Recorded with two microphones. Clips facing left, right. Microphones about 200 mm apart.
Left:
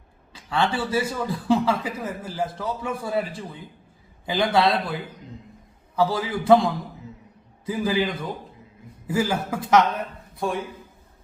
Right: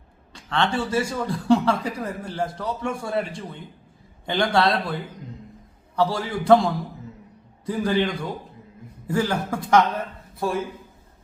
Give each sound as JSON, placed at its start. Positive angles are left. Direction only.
{"t": 0.3, "sound": "speech", "side_deg": 5}